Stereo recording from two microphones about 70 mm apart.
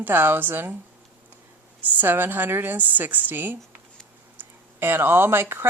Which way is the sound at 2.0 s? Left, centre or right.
Right.